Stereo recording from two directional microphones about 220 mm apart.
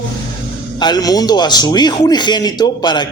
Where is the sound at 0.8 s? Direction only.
20° left (ahead or behind).